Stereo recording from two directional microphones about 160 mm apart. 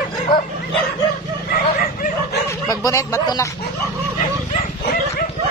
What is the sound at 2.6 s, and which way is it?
Speech, 20° left (ahead or behind).